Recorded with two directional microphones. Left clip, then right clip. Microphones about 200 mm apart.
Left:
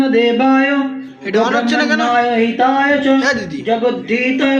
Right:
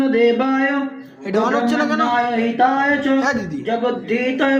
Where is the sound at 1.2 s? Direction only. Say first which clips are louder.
Left 3 dB; 20° right (ahead or behind).